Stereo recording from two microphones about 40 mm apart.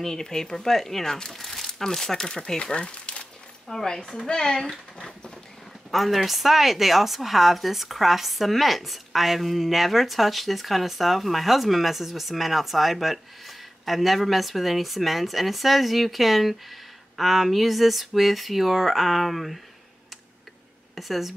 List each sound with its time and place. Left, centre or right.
0.0 s speech: centre
3.6 s speech: centre
4.9 s a sound: left
5.9 s a woman's voice: centre
20.9 s speech: centre